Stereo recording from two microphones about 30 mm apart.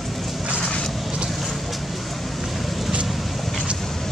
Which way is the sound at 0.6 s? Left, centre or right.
Left.